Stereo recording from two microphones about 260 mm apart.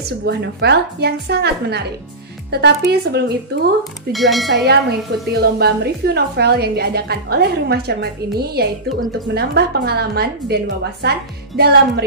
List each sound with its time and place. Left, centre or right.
0.2 s a woman's voice: right
4.1 s speech: centre
4.6 s a woman's voice: right